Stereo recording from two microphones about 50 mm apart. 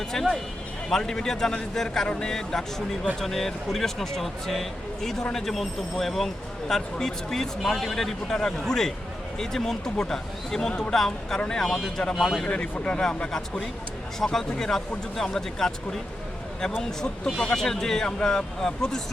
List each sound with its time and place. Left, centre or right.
0.1 s speech: centre
12.9 s speech: centre
17.4 s speech: centre